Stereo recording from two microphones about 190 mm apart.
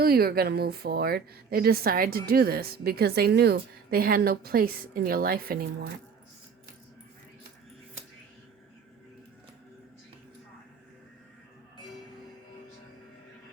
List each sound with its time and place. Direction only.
0.0 s speech: 55° right (ahead or behind)